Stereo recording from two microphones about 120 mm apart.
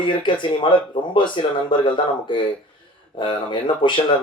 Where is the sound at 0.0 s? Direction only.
40° left (ahead or behind).